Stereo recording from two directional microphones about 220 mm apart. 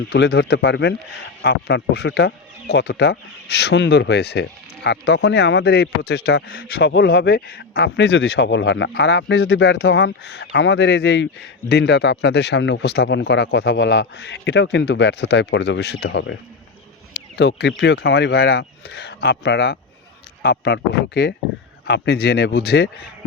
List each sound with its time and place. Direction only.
0.1 s speech: 45° left (ahead or behind)